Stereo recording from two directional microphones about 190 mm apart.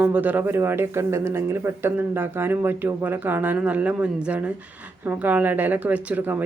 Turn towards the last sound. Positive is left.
turn(degrees=-10)  # may be behind; listen again after turning